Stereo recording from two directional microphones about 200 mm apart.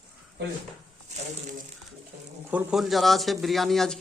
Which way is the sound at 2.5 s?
5° right (ahead or behind).